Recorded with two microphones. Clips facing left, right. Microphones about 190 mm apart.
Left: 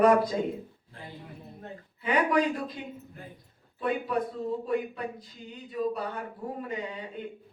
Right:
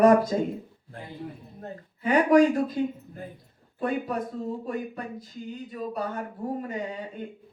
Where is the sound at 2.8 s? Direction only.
45° right (ahead or behind).